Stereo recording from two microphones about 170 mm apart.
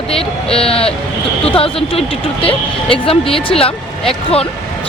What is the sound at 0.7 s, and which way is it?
Speech, 35° left (ahead or behind).